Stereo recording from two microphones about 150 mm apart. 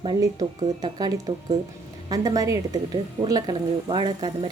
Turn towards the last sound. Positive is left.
turn(degrees=-30)  # may be behind; listen again after turning